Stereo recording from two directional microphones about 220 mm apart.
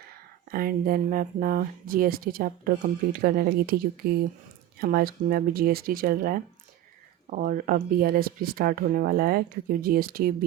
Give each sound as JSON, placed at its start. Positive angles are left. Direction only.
{"t": 0.5, "sound": "speech", "side_deg": -40}